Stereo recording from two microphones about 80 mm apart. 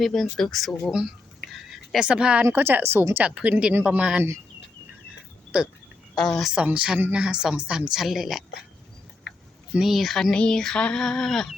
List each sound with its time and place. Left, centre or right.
0.0 s a woman's voice: centre
1.5 s a sound: centre
2.0 s speech: centre
2.4 s speech: right
3.2 s speech: centre
5.5 s speech: centre
6.1 s a woman's voice: centre
6.7 s a woman's voice: centre
9.7 s a woman's voice: centre
10.3 s female singing: centre